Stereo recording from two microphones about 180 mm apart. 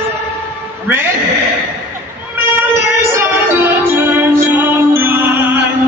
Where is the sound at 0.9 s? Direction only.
10° right (ahead or behind).